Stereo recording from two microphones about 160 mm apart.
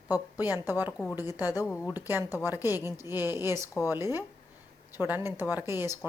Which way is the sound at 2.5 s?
15° right (ahead or behind).